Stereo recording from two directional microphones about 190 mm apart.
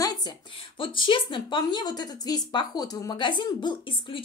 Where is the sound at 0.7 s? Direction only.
25° left (ahead or behind).